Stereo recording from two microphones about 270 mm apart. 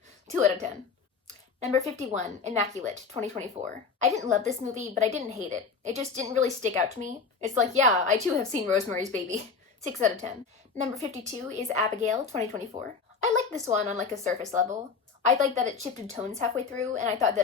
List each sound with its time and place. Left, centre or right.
0.3 s a woman's voice: right
1.6 s a woman's voice: right
4.0 s a woman's voice: right